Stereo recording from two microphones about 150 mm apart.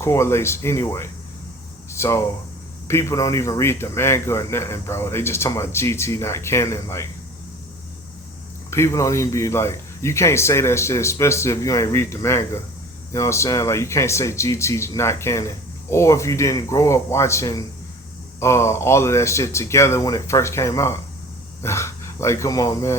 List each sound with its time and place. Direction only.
0.0 s a man's voice: 20° left (ahead or behind)
1.9 s a sound: 20° left (ahead or behind)
2.8 s a man's voice: 15° left (ahead or behind)
8.7 s speech: 20° left (ahead or behind)